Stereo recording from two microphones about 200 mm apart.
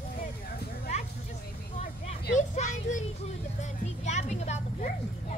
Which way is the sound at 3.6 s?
35° left (ahead or behind).